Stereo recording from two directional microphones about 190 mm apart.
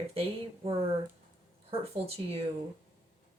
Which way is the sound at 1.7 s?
30° right (ahead or behind).